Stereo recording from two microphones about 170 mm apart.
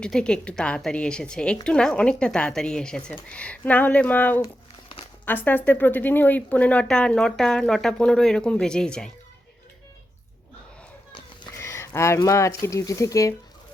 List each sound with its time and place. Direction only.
0.0 s speech: 5° left (ahead or behind)
11.5 s speech: 15° left (ahead or behind)